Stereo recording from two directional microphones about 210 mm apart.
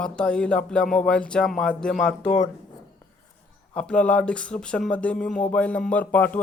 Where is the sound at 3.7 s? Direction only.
5° left (ahead or behind).